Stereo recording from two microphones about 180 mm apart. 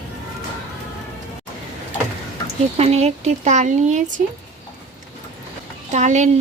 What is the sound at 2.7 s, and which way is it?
A child's voice, 35° right (ahead or behind).